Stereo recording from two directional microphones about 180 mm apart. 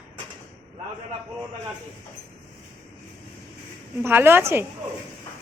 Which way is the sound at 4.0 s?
10° right (ahead or behind).